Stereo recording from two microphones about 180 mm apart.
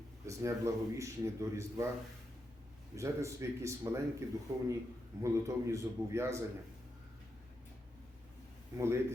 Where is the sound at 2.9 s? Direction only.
15° right (ahead or behind).